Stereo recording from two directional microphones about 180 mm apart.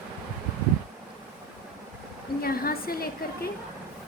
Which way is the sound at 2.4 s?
55° left (ahead or behind).